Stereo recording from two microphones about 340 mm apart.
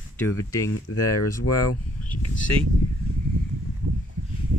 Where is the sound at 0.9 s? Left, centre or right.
Left.